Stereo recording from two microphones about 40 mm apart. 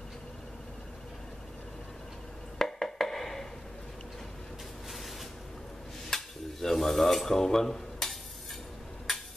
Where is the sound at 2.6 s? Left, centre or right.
Centre.